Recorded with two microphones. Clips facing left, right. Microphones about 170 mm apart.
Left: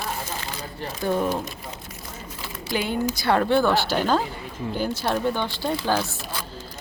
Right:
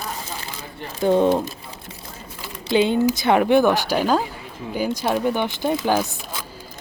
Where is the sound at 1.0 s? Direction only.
20° right (ahead or behind).